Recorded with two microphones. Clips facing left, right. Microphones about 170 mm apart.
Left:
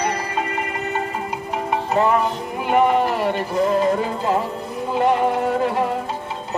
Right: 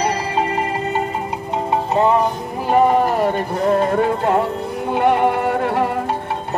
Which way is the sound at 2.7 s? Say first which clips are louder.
Right 3 dB; 40° right (ahead or behind).